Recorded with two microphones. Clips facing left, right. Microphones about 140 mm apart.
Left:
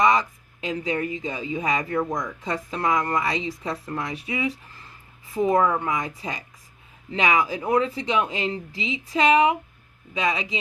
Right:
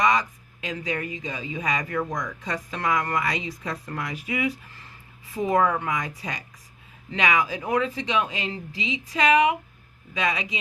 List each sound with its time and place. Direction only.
0.0 s speech: 25° left (ahead or behind)